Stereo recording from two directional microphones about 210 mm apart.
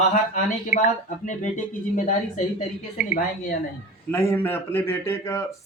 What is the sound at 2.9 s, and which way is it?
Speech, 40° left (ahead or behind).